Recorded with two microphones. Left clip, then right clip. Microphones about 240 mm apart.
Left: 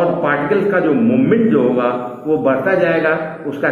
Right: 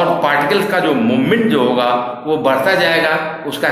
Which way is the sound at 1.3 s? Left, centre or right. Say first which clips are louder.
Right 1 dB; right.